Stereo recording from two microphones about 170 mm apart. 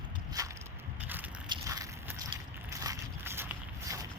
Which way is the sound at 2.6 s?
20° right (ahead or behind).